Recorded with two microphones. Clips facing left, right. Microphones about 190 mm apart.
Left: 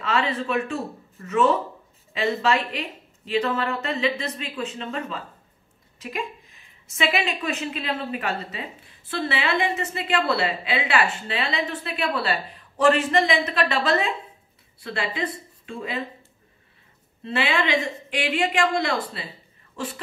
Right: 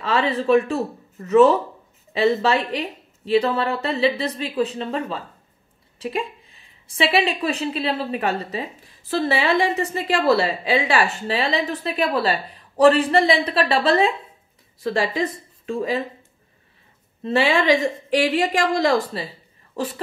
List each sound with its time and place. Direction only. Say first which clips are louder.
0.0 s a woman's voice: right 4 dB; 35° right (ahead or behind)
17.2 s a woman's voice: right 5 dB; 35° right (ahead or behind)